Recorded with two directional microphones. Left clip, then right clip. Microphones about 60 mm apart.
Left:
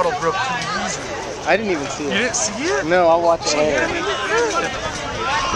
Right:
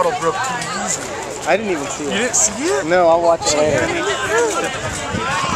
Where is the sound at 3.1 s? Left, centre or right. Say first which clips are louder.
Right 2 dB; right.